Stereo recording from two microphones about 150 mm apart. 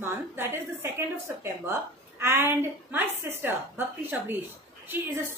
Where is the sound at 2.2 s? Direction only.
15° right (ahead or behind).